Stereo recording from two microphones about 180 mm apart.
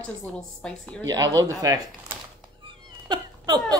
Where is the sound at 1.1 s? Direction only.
20° right (ahead or behind).